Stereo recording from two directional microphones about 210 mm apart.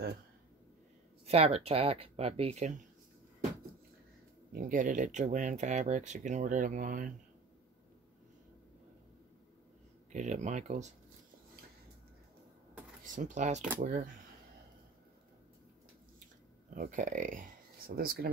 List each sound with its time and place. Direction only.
1.2 s speech: 30° right (ahead or behind)
4.5 s speech: 40° right (ahead or behind)
10.1 s speech: 35° right (ahead or behind)
13.0 s speech: 35° right (ahead or behind)
16.7 s speech: 40° right (ahead or behind)